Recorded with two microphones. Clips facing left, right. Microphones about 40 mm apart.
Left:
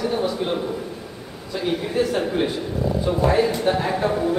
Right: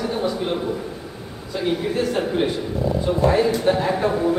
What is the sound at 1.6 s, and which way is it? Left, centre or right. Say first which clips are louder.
A man's voice: even; centre.